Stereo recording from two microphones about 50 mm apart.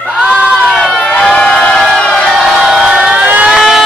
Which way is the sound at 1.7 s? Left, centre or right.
Centre.